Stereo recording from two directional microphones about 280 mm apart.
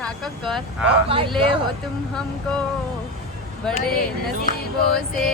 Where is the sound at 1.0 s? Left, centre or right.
Centre.